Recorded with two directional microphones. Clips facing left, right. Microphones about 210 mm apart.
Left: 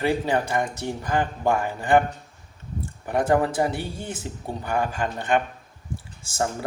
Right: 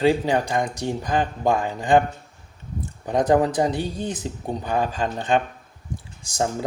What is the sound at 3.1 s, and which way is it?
Speech, 20° right (ahead or behind).